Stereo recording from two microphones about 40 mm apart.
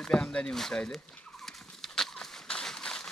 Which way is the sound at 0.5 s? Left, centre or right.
Centre.